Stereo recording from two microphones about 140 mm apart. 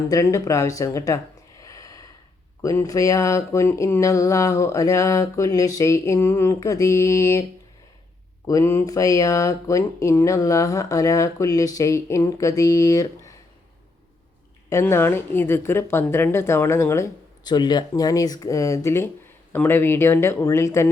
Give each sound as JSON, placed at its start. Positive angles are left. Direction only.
{"t": 0.1, "sound": "speech", "side_deg": 25}
{"t": 8.4, "sound": "speech", "side_deg": 20}
{"t": 14.7, "sound": "a woman's voice", "side_deg": 20}
{"t": 17.4, "sound": "a woman's voice", "side_deg": 30}